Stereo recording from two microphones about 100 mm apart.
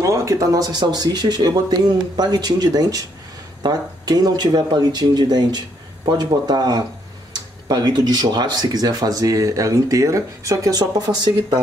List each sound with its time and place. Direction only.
0.0 s speech: 30° right (ahead or behind)